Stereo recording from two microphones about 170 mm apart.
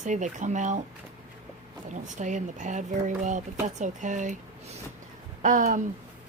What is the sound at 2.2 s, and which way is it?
Speech, 45° right (ahead or behind).